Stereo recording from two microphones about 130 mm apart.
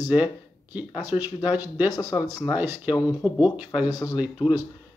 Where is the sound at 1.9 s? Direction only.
25° left (ahead or behind).